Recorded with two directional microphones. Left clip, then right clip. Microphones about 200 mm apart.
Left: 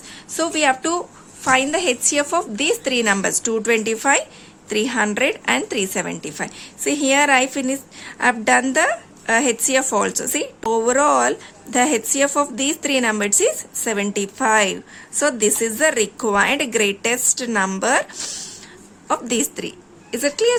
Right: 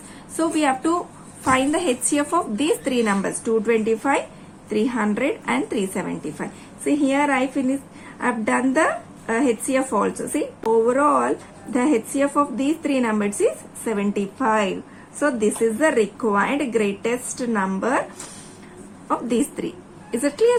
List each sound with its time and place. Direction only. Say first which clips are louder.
0.3 s a woman's voice: left 2 dB; 35° left (ahead or behind)
19.0 s a woman's voice: left 1 dB; 40° left (ahead or behind)